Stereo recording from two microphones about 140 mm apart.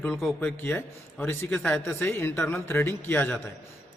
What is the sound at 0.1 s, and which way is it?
Speech, centre (ahead or behind).